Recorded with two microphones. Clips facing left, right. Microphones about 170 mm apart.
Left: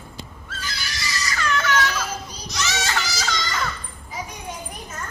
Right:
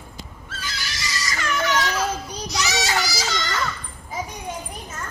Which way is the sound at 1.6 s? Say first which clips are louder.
Right 1 dB; 15° right (ahead or behind).